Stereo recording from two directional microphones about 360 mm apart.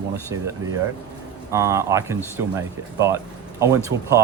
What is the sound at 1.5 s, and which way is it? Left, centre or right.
Speech, centre.